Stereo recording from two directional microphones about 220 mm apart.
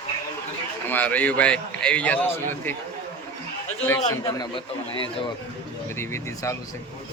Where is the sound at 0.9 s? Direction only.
5° left (ahead or behind).